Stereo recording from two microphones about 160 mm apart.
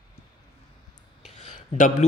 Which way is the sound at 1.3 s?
45° left (ahead or behind).